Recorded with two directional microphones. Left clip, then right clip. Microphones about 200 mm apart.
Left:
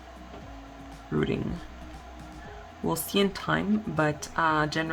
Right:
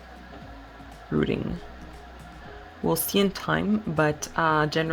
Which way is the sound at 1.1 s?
15° right (ahead or behind).